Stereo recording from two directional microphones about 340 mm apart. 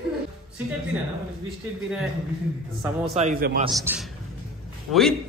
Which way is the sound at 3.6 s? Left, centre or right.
Centre.